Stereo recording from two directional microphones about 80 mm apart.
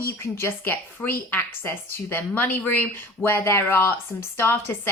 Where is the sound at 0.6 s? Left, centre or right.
Left.